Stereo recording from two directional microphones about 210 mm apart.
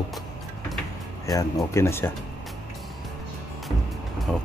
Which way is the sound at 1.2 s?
15° left (ahead or behind).